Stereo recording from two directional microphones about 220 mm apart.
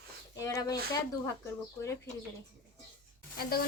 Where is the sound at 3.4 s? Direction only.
45° left (ahead or behind).